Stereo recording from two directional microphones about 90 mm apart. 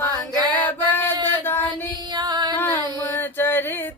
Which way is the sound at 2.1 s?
50° right (ahead or behind).